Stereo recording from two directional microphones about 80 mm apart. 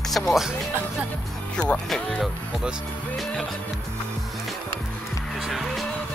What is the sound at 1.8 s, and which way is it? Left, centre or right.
Speech, centre.